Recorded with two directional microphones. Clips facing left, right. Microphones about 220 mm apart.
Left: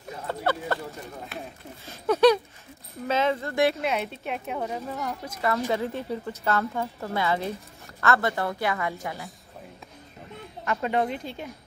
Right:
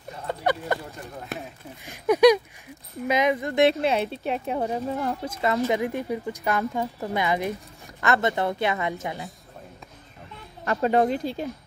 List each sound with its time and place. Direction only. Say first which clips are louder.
0.3 s speech: right 2 dB; 15° right (ahead or behind)
1.3 s speech: right 5 dB; 45° right (ahead or behind)
1.9 s speech: right 2 dB; 15° right (ahead or behind); by 5.5 s 30° right (ahead or behind)
5.7 s speech: right 3 dB; 15° right (ahead or behind)
10.6 s speech: right 5 dB; 35° right (ahead or behind)